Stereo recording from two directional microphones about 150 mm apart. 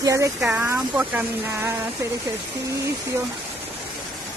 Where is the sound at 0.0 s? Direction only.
20° right (ahead or behind).